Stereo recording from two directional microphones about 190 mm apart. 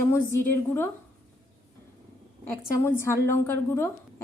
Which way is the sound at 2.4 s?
10° left (ahead or behind).